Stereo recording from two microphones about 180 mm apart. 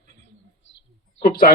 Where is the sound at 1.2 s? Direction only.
55° left (ahead or behind).